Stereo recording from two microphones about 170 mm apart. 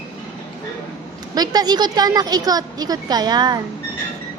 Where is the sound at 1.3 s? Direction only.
25° right (ahead or behind).